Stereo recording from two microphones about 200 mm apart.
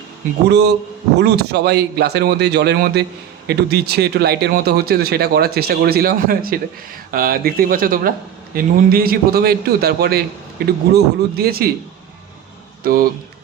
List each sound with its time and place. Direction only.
0.4 s speech: 55° right (ahead or behind)
12.8 s speech: 45° right (ahead or behind)